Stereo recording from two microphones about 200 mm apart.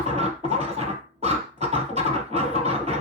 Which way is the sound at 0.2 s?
30° right (ahead or behind).